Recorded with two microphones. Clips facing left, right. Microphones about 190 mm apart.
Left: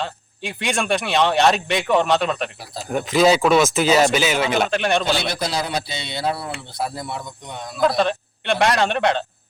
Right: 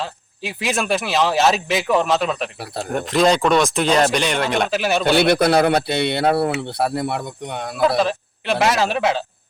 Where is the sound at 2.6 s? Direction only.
65° right (ahead or behind).